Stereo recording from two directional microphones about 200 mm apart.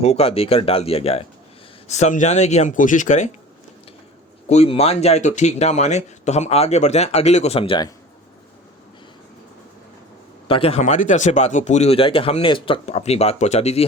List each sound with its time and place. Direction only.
0.0 s speech: 30° left (ahead or behind)
4.4 s speech: 30° left (ahead or behind)
10.5 s speech: 30° left (ahead or behind)